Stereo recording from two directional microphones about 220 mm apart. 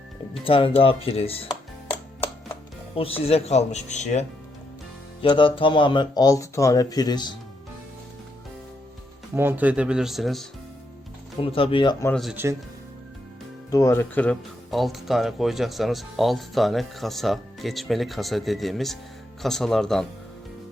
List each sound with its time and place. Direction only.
0.4 s speech: 25° left (ahead or behind)
2.9 s speech: 25° left (ahead or behind)
9.3 s speech: 10° right (ahead or behind)
11.3 s speech: 25° left (ahead or behind)
12.0 s speech: 5° left (ahead or behind)
13.7 s speech: 15° left (ahead or behind)